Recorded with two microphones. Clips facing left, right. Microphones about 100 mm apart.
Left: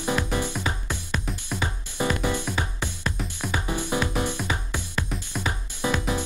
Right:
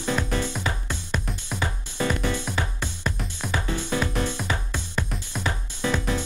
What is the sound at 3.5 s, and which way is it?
Music, 15° left (ahead or behind).